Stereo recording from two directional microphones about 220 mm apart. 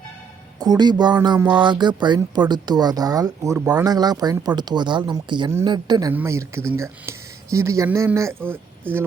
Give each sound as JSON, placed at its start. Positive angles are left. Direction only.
{"t": 0.6, "sound": "speech", "side_deg": -20}